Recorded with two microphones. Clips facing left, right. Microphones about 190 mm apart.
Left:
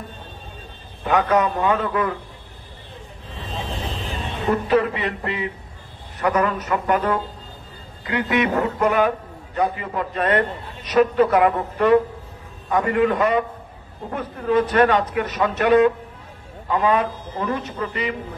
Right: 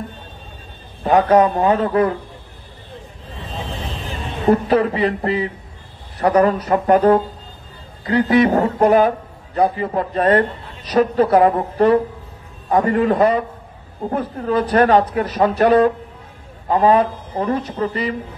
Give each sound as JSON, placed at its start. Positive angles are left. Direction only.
{"t": 1.0, "sound": "a man's voice", "side_deg": -35}
{"t": 4.5, "sound": "a man's voice", "side_deg": -35}